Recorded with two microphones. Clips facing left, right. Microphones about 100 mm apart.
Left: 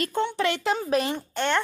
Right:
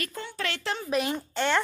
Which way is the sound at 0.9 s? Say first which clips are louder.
Even; centre (ahead or behind).